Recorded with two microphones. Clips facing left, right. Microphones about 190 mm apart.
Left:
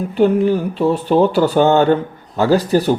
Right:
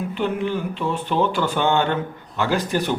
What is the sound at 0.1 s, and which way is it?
Speech, 40° left (ahead or behind).